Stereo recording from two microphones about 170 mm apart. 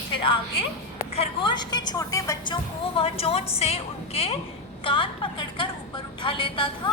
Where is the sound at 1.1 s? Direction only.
30° left (ahead or behind).